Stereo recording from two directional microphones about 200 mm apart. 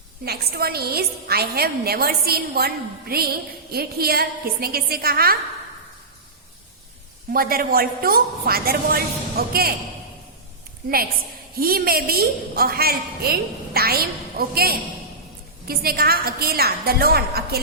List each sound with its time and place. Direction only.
0.3 s a woman's voice: 50° right (ahead or behind)
7.3 s a woman's voice: 45° right (ahead or behind)
11.5 s a woman's voice: 50° right (ahead or behind)